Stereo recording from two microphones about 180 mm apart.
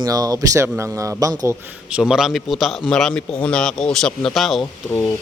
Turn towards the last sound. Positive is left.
turn(degrees=10)  # may be behind; listen again after turning